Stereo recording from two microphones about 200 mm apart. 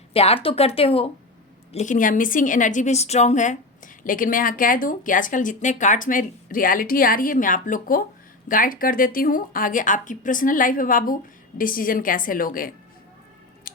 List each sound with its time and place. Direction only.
0.1 s a woman's voice: 30° left (ahead or behind); by 12.7 s 45° left (ahead or behind)
13.7 s scissors: 45° left (ahead or behind)